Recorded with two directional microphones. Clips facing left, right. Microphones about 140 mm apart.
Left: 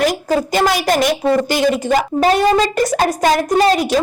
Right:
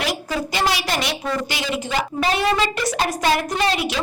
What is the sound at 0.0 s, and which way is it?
A woman's voice, 45° left (ahead or behind).